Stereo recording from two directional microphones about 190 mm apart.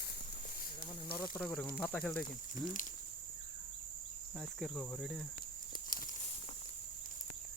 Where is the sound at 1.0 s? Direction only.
50° left (ahead or behind).